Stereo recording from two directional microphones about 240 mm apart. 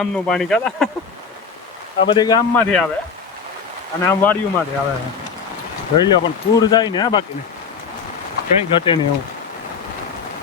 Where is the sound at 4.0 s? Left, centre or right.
Centre.